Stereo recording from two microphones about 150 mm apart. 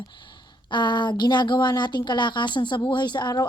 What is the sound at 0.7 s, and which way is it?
Speech, 30° left (ahead or behind).